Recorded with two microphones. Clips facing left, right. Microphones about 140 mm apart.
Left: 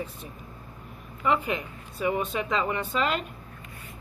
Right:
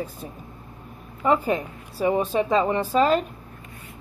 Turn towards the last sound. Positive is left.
turn(degrees=-35)  # may be behind; listen again after turning